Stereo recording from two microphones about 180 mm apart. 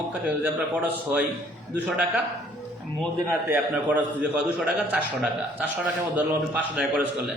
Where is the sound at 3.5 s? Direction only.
10° right (ahead or behind).